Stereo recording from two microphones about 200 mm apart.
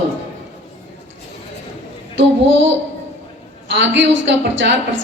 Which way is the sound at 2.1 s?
65° right (ahead or behind).